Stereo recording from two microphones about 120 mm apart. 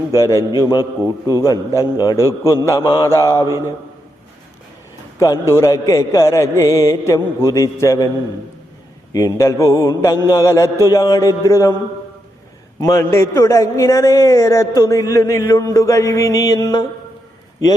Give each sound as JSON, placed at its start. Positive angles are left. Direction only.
{"t": 0.1, "sound": "a man's voice", "side_deg": 25}
{"t": 5.2, "sound": "a man's voice", "side_deg": 25}
{"t": 9.1, "sound": "a man's voice", "side_deg": 25}
{"t": 12.8, "sound": "a man's voice", "side_deg": 25}